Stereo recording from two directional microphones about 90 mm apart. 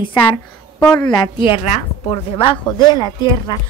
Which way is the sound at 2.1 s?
80° left.